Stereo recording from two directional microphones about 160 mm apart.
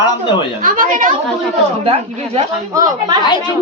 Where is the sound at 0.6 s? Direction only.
55° right (ahead or behind).